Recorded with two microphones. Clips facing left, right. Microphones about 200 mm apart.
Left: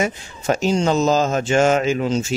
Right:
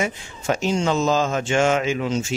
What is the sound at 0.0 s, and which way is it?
Speech, 40° left (ahead or behind).